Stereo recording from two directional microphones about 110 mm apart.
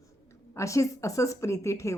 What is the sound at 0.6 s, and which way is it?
A woman's voice, 30° left (ahead or behind).